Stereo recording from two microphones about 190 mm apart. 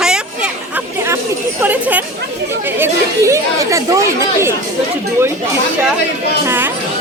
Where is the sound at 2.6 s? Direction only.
15° right (ahead or behind).